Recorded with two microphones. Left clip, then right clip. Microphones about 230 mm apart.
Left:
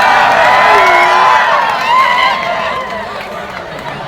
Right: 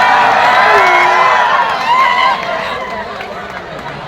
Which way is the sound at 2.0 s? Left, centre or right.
Centre.